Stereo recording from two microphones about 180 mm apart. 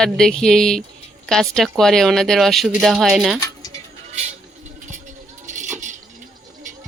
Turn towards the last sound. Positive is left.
turn(degrees=-40)  # may be behind; listen again after turning